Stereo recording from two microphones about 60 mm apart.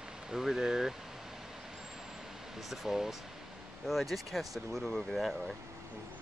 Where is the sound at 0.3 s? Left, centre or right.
Centre.